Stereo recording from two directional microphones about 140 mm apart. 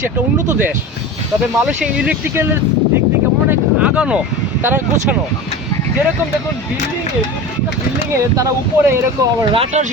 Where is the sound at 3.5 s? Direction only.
10° right (ahead or behind).